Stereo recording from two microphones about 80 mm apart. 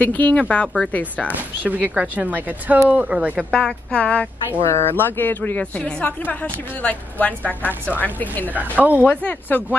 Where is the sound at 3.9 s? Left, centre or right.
Centre.